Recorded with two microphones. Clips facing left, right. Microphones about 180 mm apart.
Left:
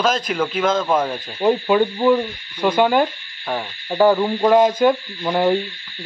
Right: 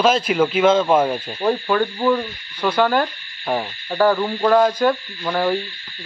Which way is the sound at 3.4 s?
10° right (ahead or behind).